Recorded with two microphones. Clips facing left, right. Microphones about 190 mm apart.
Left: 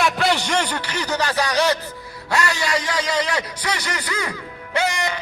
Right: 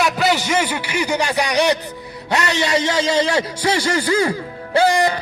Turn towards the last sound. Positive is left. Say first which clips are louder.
# right 7 dB
turn(degrees=-35)  # may be behind; listen again after turning